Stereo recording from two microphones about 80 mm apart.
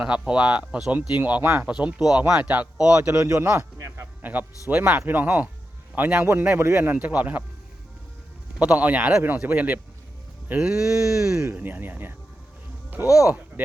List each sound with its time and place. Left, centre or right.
0.0 s a man's voice: centre
1.7 s speech: centre
3.2 s speech: right
3.8 s a sound: right
4.2 s a man's voice: right
8.5 s a man's voice: centre
11.3 s a man's voice: right